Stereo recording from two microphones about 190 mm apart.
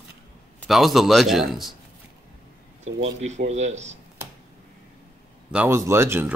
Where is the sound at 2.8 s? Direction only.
35° right (ahead or behind).